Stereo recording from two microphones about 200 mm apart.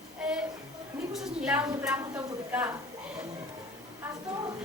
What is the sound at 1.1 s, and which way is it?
A woman's voice, 5° right (ahead or behind).